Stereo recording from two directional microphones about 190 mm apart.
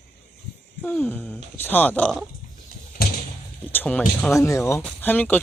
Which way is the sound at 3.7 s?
10° left (ahead or behind).